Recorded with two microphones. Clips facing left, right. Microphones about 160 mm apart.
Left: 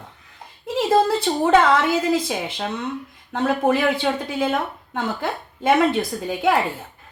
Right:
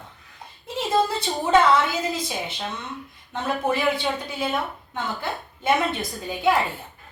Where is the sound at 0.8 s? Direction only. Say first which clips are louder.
Left 5 dB; 65° left (ahead or behind); by 5.7 s 90° left.